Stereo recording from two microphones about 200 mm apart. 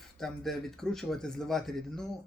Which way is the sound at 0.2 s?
Centre (ahead or behind).